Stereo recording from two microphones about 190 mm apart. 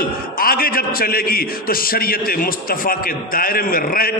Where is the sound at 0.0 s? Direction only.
50° left (ahead or behind).